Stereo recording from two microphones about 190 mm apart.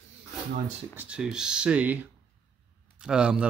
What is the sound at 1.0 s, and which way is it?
Speech, 5° right (ahead or behind).